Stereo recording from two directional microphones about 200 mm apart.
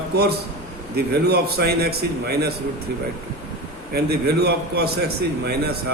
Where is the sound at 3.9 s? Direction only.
55° right (ahead or behind).